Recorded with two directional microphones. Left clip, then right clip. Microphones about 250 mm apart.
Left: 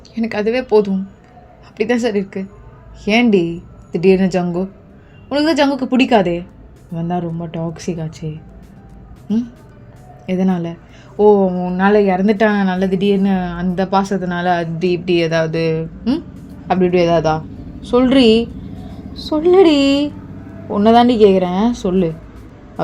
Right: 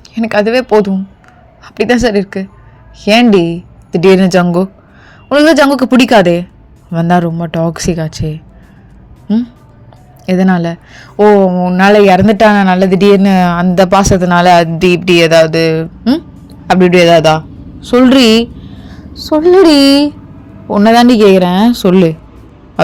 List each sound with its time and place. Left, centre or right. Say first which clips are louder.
0.1 s a woman's voice: right 8 dB; right
10.2 s a man's voice: right 8 dB; right